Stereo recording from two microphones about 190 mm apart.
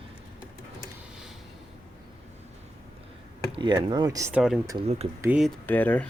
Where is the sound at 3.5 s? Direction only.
25° right (ahead or behind); by 5.5 s 5° right (ahead or behind).